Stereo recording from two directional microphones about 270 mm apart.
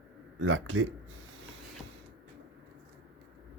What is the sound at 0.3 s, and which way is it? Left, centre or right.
Speech, right.